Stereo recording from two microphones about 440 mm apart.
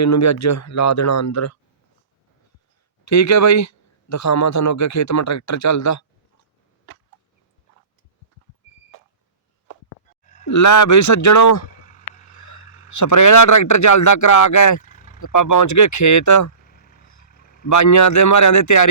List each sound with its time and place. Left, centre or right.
0.0 s a man's voice: left
3.0 s a man's voice: left
10.4 s a man's voice: left
11.8 s a sound: centre
12.9 s a man's voice: left
14.8 s vehicle: centre
15.2 s a man's voice: left
16.6 s vehicle: centre
17.7 s a man's voice: left